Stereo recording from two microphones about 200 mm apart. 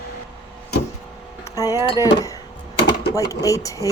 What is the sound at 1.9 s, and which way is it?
Speech, 15° left (ahead or behind).